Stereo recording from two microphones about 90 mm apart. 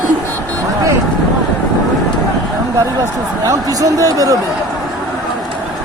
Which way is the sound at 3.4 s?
40° right (ahead or behind).